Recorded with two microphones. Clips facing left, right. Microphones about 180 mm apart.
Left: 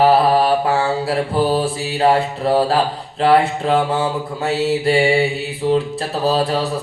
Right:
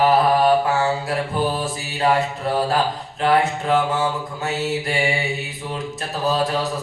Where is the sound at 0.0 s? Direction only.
30° left (ahead or behind).